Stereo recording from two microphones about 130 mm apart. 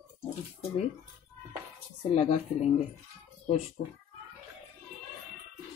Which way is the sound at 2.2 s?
55° left (ahead or behind).